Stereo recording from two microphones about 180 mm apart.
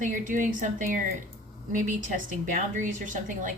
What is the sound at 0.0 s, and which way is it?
A woman's voice, 45° right (ahead or behind).